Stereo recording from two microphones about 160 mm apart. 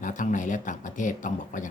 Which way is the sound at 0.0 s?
55° left (ahead or behind).